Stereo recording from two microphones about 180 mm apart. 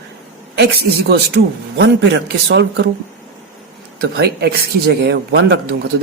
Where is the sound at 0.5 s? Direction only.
65° right (ahead or behind).